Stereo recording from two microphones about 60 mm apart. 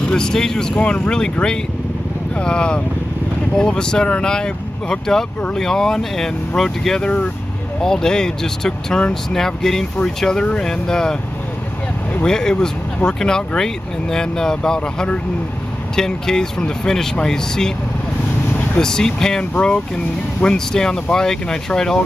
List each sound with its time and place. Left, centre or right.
0.0 s speech: centre
7.0 s speech: centre
12.3 s speech: centre
18.8 s speech: centre
20.4 s speech: centre